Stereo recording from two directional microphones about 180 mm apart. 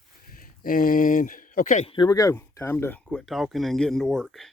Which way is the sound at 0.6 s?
50° left (ahead or behind).